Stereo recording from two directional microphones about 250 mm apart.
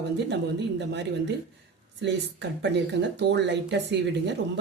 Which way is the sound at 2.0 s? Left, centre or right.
Right.